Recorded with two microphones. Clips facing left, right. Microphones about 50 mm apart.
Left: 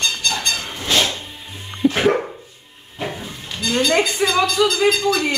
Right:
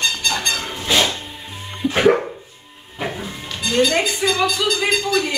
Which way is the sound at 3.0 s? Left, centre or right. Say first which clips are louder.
Right 1 dB; centre.